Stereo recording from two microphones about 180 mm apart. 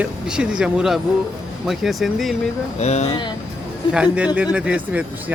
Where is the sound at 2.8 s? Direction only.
40° left (ahead or behind).